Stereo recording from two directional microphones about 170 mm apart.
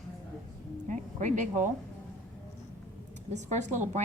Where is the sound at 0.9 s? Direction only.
45° right (ahead or behind).